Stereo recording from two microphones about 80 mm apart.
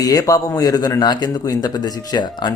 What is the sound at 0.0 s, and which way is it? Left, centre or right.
Speech, left.